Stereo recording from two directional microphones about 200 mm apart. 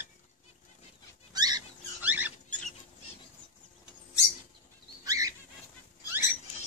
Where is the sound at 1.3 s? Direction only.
20° right (ahead or behind).